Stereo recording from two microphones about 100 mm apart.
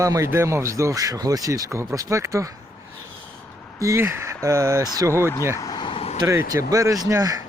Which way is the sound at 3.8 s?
30° right (ahead or behind).